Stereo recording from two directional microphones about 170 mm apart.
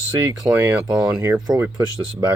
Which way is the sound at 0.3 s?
15° right (ahead or behind).